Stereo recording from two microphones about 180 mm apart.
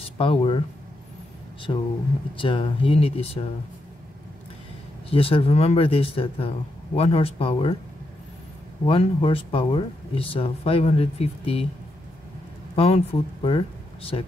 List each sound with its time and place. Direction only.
0.2 s speech: 30° left (ahead or behind)
1.7 s speech: 30° left (ahead or behind)
5.1 s speech: 30° left (ahead or behind)
8.8 s speech: 30° left (ahead or behind)
12.7 s speech: 35° left (ahead or behind)